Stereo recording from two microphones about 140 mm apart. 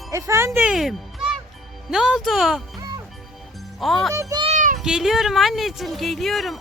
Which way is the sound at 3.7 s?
Centre (ahead or behind).